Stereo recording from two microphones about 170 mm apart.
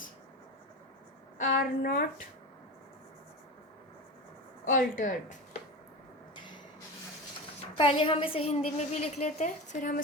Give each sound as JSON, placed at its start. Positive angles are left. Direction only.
{"t": 1.4, "sound": "speech", "side_deg": 55}
{"t": 4.6, "sound": "speech", "side_deg": 50}
{"t": 7.8, "sound": "a woman's voice", "side_deg": 30}